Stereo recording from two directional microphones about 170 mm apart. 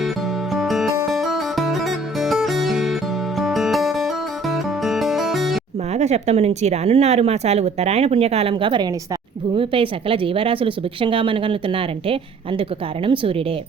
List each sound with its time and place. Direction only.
0.5 s music: centre (ahead or behind)
5.9 s speech: 40° right (ahead or behind)